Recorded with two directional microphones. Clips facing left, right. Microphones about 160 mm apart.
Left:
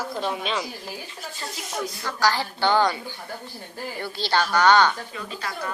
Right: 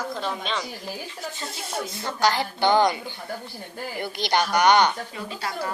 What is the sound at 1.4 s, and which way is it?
Speech, 25° right (ahead or behind).